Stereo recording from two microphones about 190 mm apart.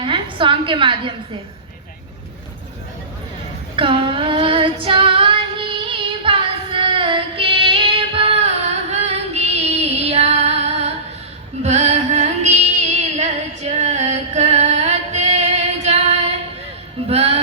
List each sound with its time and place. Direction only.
0.0 s a woman's voice: 25° right (ahead or behind)
3.8 s female singing: 25° right (ahead or behind)
11.6 s music: 35° right (ahead or behind)